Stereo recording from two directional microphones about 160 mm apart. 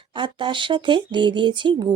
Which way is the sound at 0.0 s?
30° right (ahead or behind).